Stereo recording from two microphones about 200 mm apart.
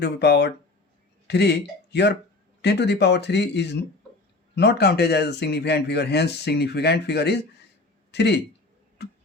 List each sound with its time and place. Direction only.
0.0 s a man's voice: 55° left (ahead or behind)
9.0 s music: 55° left (ahead or behind)